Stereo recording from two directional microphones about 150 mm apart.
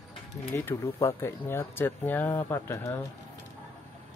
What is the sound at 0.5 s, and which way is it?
Speech, 20° left (ahead or behind).